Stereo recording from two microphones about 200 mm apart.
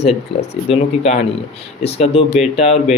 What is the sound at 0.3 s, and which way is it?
Speech, 30° left (ahead or behind).